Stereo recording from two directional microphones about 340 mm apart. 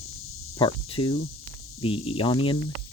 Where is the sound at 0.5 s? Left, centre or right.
Centre.